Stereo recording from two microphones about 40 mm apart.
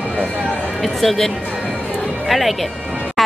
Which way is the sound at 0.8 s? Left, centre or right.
Centre.